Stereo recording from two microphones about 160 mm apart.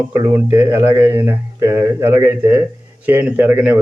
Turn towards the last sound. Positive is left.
turn(degrees=-10)  # may be behind; listen again after turning